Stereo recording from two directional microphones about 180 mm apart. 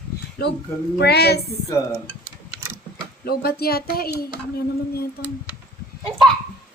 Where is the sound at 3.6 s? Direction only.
60° left (ahead or behind).